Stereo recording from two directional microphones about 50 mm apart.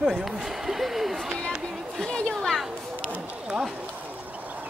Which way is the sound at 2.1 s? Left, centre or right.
Left.